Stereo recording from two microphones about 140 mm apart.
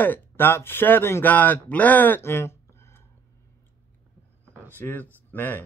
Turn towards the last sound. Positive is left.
turn(degrees=15)  # may be behind; listen again after turning